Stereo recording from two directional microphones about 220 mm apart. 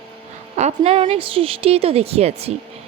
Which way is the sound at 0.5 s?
30° right (ahead or behind).